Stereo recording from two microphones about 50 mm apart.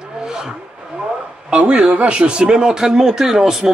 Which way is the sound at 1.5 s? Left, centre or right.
Right.